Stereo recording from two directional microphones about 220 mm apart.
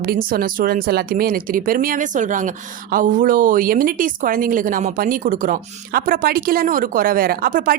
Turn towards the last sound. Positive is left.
turn(degrees=-40)  # may be behind; listen again after turning